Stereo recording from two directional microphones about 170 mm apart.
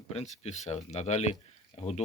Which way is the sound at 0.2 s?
40° left (ahead or behind).